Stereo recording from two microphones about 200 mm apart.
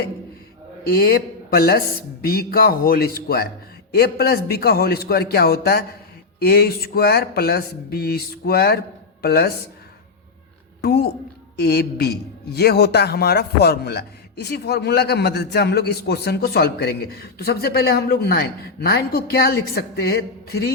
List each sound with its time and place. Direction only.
0.9 s a man's voice: 50° left (ahead or behind)
10.8 s a woman's voice: 50° left (ahead or behind)